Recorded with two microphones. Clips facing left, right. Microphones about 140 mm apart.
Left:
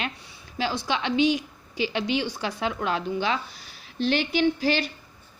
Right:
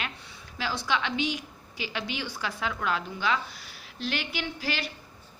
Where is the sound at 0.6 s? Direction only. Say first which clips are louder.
Left 3 dB; 20° left (ahead or behind).